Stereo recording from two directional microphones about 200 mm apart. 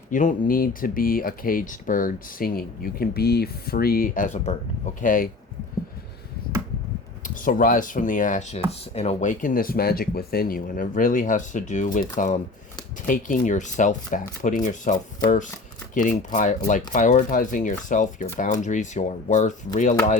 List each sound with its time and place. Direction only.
0.1 s speech: 40° left (ahead or behind)
7.3 s speech: 45° left (ahead or behind)